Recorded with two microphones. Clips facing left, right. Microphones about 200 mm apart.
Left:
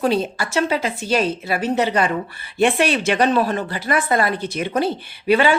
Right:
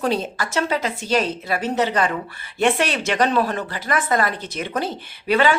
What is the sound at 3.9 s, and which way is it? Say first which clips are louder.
Speech: left 2 dB; 30° left (ahead or behind).